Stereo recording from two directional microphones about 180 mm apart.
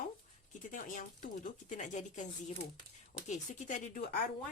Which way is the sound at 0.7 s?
50° left (ahead or behind).